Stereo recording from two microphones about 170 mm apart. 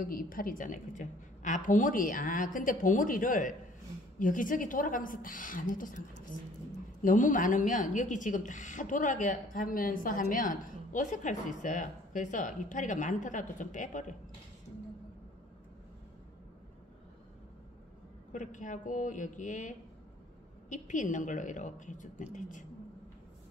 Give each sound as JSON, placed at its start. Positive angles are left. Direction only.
{"t": 0.0, "sound": "a woman's voice", "side_deg": 55}
{"t": 18.3, "sound": "a woman's voice", "side_deg": 50}
{"t": 20.7, "sound": "a woman's voice", "side_deg": 50}